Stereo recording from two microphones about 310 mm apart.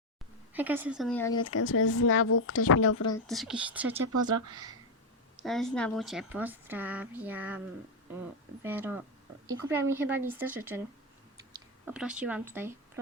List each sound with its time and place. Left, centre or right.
0.5 s speech: centre
1.5 s speech: left
3.2 s speech: centre
4.1 s speech: right
5.4 s speech: centre
8.6 s speech: centre
11.9 s speech: centre